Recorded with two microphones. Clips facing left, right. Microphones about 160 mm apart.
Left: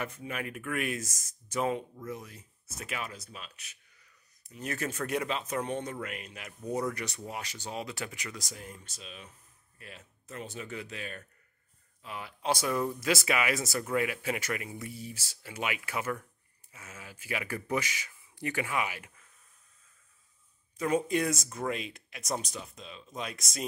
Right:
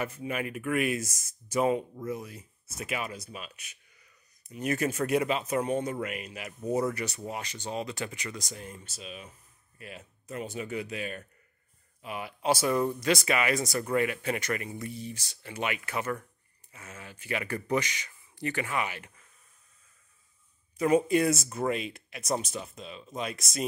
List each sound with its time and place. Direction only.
0.0 s speech: 5° right (ahead or behind); by 19.1 s 10° left (ahead or behind)
20.7 s speech: 10° right (ahead or behind)